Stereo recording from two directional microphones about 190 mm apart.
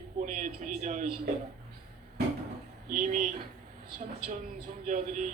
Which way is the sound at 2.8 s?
45° right (ahead or behind).